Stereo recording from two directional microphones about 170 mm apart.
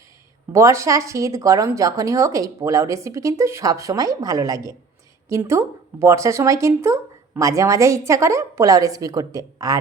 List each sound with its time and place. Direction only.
0.5 s a woman's voice: 15° right (ahead or behind)